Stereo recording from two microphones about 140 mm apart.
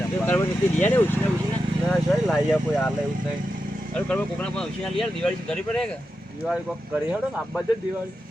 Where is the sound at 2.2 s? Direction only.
Centre (ahead or behind).